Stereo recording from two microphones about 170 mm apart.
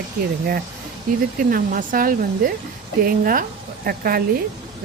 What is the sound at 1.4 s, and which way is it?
Speech, 55° right (ahead or behind).